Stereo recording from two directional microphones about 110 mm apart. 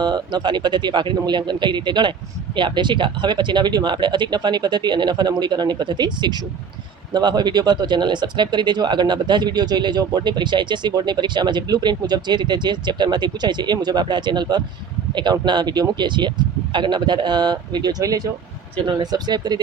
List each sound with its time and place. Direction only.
0.0 s speech: 40° right (ahead or behind)